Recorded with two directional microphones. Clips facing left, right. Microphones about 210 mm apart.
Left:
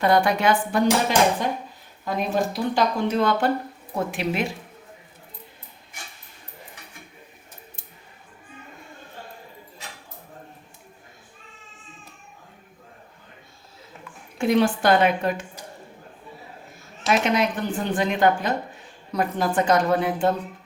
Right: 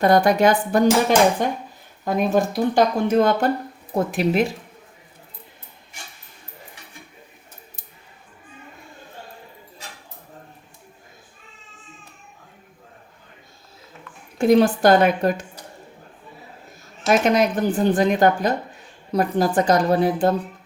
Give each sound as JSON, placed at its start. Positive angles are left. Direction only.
{"t": 0.0, "sound": "speech", "side_deg": -40}
{"t": 14.3, "sound": "speech", "side_deg": -40}
{"t": 17.1, "sound": "speech", "side_deg": -40}